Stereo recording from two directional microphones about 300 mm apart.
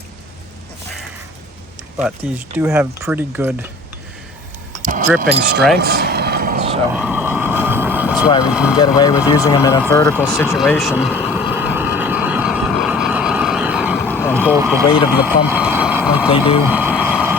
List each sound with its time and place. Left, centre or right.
2.2 s speech: centre
4.8 s speech: right
5.7 s vehicle: right
6.9 s vehicle: centre
8.4 s speech: centre
9.0 s speech: centre
11.5 s vehicle: centre
14.5 s speech: centre
14.8 s speech: centre
15.4 s speech: centre
16.6 s vehicle: centre